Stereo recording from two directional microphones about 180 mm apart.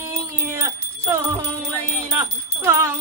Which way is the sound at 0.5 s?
15° right (ahead or behind).